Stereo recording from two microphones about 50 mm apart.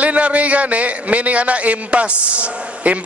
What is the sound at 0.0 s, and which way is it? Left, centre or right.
A man's voice, right.